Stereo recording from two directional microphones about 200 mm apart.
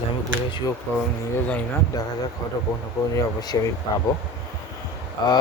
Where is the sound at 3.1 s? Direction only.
15° left (ahead or behind).